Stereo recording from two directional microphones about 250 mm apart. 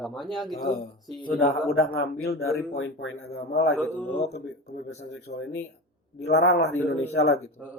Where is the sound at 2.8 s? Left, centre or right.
Left.